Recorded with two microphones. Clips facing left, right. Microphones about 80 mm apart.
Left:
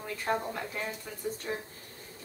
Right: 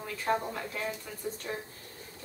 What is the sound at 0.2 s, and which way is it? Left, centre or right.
Speech, centre.